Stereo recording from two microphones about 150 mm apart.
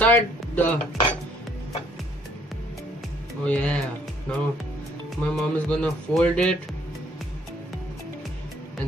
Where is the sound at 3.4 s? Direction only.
10° left (ahead or behind).